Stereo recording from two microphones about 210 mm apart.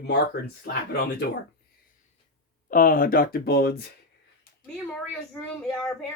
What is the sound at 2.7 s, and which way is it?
Speech, 40° left (ahead or behind).